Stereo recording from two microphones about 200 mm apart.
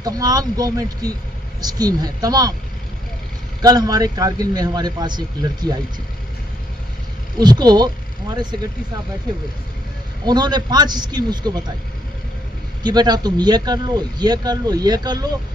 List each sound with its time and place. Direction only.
0.0 s a man's voice: 20° right (ahead or behind)
3.6 s a man's voice: 20° right (ahead or behind)
7.3 s a man's voice: 20° right (ahead or behind)
10.2 s a man's voice: 20° right (ahead or behind)
12.8 s a man's voice: 20° right (ahead or behind)